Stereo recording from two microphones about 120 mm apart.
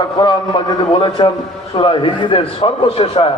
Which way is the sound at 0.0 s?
35° left (ahead or behind).